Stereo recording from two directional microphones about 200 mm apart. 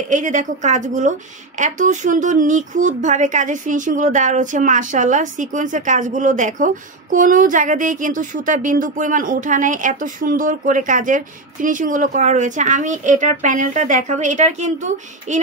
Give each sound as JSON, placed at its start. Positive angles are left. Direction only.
{"t": 0.1, "sound": "speech", "side_deg": -40}